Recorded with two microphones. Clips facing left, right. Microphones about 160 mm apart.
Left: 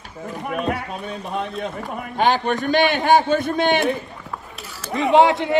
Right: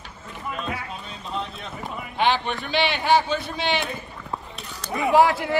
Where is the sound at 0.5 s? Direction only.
60° left (ahead or behind).